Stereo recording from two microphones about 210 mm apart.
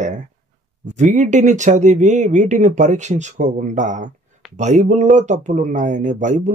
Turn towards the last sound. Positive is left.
turn(degrees=-35)  # may be behind; listen again after turning